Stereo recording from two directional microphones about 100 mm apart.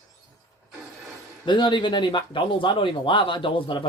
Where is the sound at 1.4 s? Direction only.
50° left (ahead or behind).